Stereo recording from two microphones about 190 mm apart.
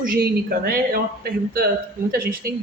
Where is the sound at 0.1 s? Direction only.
50° right (ahead or behind).